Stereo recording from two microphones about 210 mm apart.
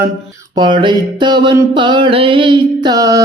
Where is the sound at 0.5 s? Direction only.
20° right (ahead or behind).